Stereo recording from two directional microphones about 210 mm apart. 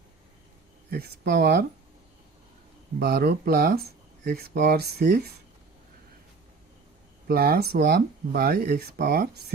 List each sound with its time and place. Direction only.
0.9 s speech: 50° right (ahead or behind)
3.0 s speech: 50° right (ahead or behind)
7.3 s speech: 45° right (ahead or behind)